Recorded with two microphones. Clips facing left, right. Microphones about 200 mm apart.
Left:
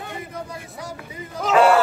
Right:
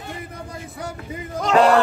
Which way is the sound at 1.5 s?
5° left (ahead or behind).